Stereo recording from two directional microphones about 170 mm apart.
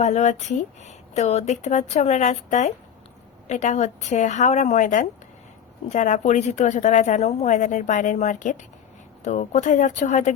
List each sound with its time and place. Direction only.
0.0 s a woman's voice: 45° left (ahead or behind)